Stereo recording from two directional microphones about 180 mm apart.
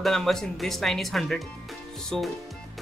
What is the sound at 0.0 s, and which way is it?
Speech, centre (ahead or behind).